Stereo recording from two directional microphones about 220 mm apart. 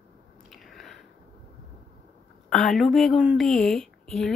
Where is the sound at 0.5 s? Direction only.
Centre (ahead or behind).